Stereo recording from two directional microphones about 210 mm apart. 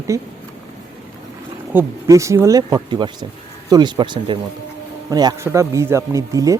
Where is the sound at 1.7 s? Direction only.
15° right (ahead or behind).